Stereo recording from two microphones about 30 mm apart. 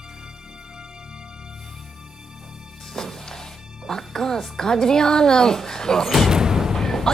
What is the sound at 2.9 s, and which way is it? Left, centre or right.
Music, centre.